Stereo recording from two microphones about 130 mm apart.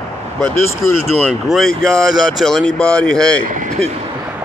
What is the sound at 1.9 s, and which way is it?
A man's voice, centre (ahead or behind).